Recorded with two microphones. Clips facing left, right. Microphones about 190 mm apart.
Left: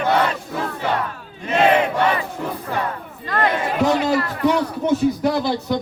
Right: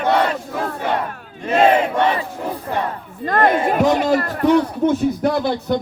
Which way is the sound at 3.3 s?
50° right (ahead or behind).